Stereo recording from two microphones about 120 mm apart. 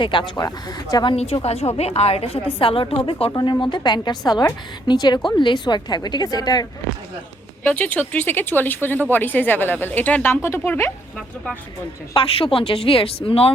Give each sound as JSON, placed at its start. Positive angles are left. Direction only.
{"t": 0.0, "sound": "a woman's voice", "side_deg": 40}
{"t": 1.1, "sound": "a woman's voice", "side_deg": 55}
{"t": 3.3, "sound": "a woman's voice", "side_deg": 40}
{"t": 7.6, "sound": "speech", "side_deg": 15}
{"t": 12.1, "sound": "speech", "side_deg": 50}